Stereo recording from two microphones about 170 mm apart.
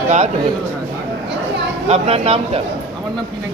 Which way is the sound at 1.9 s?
35° right (ahead or behind).